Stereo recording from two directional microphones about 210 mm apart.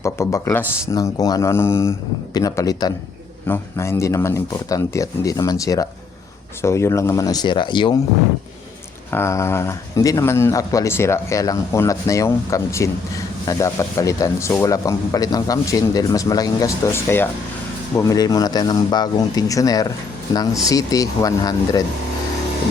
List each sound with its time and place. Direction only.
0.0 s speech: 15° left (ahead or behind)
9.0 s speech: 10° left (ahead or behind)